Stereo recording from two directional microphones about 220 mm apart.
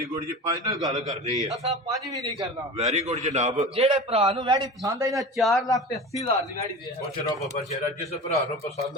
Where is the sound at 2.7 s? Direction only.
30° right (ahead or behind); by 5.1 s 15° right (ahead or behind).